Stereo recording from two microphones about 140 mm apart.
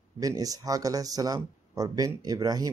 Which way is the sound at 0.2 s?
25° right (ahead or behind).